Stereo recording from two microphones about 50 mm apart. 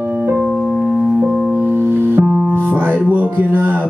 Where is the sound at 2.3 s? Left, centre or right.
Centre.